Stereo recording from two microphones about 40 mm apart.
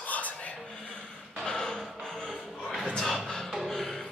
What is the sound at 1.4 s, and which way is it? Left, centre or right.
Music, centre.